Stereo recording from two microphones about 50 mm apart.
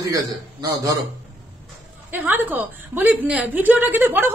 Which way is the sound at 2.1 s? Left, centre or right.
Right.